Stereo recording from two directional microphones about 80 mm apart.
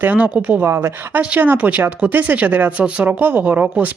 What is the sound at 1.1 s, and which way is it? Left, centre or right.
Speech, centre.